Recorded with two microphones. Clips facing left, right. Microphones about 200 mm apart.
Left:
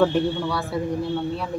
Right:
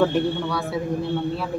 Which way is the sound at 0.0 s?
Centre (ahead or behind).